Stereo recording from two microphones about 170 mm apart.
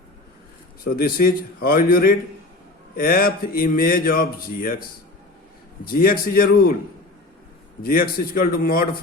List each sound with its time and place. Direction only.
0.9 s speech: 60° left (ahead or behind)
5.8 s speech: 55° left (ahead or behind)
7.8 s speech: 60° left (ahead or behind)